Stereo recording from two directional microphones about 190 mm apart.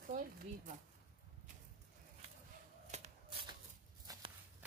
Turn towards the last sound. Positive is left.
turn(degrees=-20)  # may be behind; listen again after turning